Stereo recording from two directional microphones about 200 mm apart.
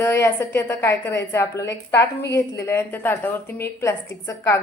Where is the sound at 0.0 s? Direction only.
10° left (ahead or behind).